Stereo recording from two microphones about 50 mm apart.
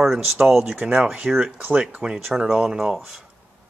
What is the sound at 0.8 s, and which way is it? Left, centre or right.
Speech, right.